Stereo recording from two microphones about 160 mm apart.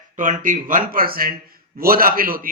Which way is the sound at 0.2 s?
55° right (ahead or behind).